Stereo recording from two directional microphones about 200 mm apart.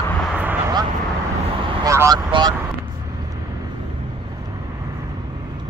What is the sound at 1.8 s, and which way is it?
Speech, 15° right (ahead or behind).